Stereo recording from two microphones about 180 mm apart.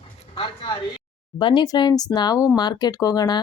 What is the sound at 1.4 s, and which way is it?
Speech, 25° left (ahead or behind).